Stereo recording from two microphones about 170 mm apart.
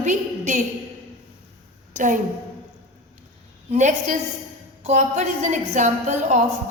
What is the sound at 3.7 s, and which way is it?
A woman's voice, 45° right (ahead or behind).